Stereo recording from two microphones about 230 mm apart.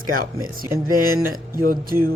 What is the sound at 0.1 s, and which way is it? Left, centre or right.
Speech, right.